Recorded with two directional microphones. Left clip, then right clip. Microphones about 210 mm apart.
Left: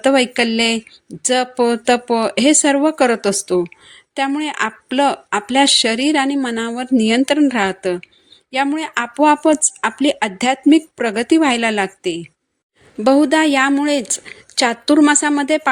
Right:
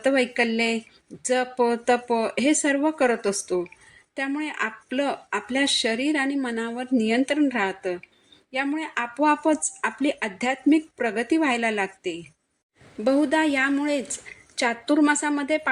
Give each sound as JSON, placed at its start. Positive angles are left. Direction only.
{"t": 0.0, "sound": "speech", "side_deg": 45}